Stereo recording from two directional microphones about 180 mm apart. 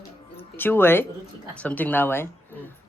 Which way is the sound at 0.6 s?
10° left (ahead or behind).